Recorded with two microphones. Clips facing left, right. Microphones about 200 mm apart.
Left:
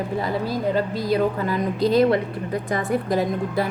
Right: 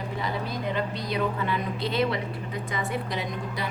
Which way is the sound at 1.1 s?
40° left (ahead or behind).